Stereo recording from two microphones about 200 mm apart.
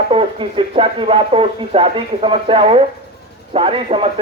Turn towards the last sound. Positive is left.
turn(degrees=-30)  # may be behind; listen again after turning